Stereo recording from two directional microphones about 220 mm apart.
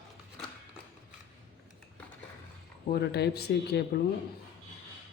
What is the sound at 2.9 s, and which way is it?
Speech, 50° left (ahead or behind).